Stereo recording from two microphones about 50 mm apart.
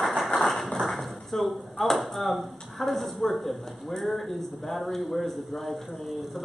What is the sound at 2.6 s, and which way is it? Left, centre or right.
Speech, centre.